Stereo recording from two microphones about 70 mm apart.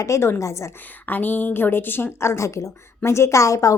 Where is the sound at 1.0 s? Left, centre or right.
Left.